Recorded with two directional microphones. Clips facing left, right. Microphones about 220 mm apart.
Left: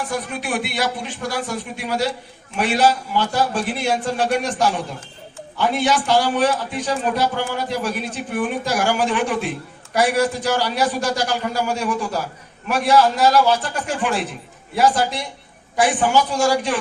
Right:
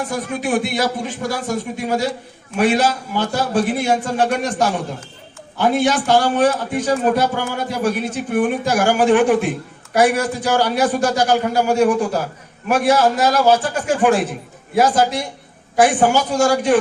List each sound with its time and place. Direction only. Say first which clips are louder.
0.3 s a man's voice: right 5 dB; 45° right (ahead or behind)